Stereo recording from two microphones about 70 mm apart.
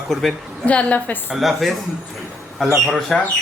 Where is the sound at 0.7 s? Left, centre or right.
Centre.